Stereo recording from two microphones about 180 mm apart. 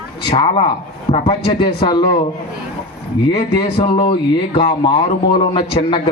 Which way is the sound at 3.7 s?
30° left (ahead or behind).